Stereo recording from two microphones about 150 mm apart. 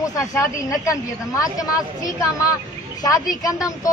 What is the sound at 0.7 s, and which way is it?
Speech, 20° left (ahead or behind).